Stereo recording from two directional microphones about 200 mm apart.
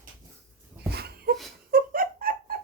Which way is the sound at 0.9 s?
50° right (ahead or behind).